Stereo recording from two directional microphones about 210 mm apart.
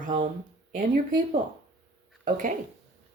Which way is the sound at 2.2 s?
40° right (ahead or behind).